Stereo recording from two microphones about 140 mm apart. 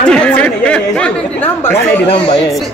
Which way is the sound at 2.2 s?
35° left (ahead or behind).